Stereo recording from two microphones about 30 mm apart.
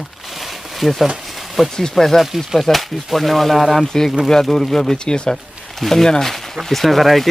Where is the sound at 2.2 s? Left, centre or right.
Centre.